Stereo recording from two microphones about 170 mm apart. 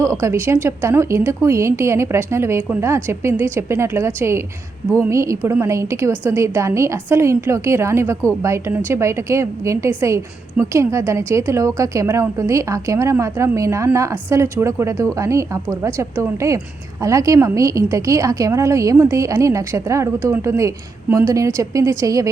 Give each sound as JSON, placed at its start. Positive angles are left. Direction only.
{"t": 0.0, "sound": "a woman's voice", "side_deg": -15}